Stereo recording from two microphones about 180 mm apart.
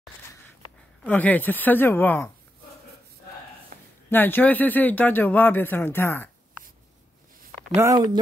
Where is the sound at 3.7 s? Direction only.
50° right (ahead or behind).